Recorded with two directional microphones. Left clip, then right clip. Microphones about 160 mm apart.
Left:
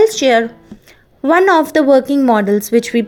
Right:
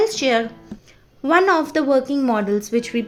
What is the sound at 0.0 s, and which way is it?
Speech, 35° left (ahead or behind).